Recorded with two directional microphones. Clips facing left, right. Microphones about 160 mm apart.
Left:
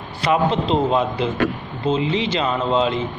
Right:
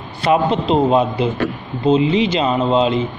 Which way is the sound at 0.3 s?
15° right (ahead or behind).